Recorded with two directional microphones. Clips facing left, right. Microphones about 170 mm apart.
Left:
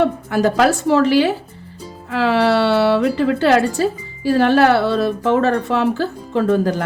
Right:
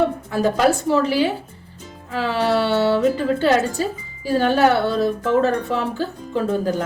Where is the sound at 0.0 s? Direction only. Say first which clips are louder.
Left 3 dB; 80° left.